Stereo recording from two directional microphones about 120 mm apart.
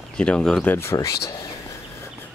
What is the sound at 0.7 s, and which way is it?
Speech, 25° left (ahead or behind).